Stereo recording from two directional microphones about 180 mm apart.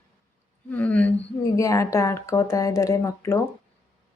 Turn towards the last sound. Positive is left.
turn(degrees=15)  # may be behind; listen again after turning